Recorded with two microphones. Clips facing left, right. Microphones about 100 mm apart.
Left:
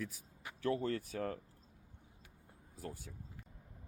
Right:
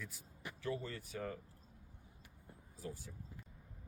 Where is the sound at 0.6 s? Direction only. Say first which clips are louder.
Left 7 dB; 60° left (ahead or behind).